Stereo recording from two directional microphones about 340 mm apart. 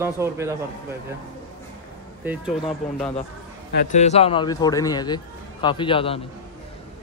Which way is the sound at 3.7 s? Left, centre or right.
Left.